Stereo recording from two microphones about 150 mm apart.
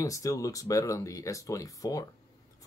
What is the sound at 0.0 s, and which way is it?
Speech, 20° left (ahead or behind).